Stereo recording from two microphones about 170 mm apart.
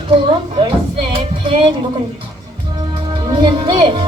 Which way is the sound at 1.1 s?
30° right (ahead or behind).